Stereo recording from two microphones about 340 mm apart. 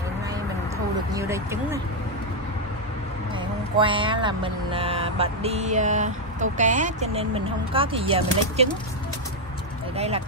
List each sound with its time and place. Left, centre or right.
1.1 s speech: centre
3.7 s speech: centre
9.9 s speech: centre